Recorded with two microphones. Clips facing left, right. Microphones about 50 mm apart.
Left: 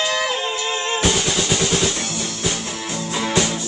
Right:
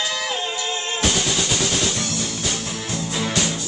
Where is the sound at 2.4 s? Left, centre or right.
Centre.